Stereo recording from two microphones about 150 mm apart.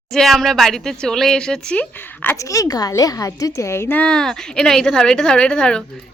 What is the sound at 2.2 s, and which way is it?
A woman's voice, 20° left (ahead or behind).